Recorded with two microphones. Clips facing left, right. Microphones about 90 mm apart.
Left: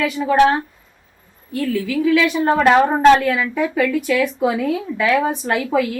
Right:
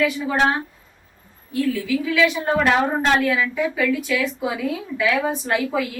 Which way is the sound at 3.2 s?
55° left (ahead or behind).